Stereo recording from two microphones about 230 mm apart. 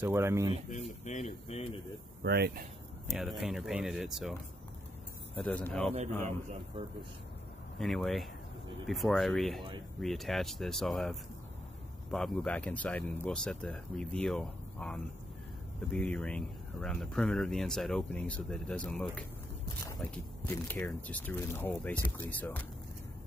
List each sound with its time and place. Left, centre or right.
0.0 s speech: centre
0.7 s speech: left
2.2 s speech: right
3.1 s speech: centre
7.8 s speech: centre